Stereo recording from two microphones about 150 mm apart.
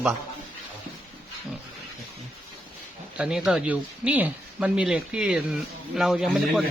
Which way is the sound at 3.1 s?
5° right (ahead or behind).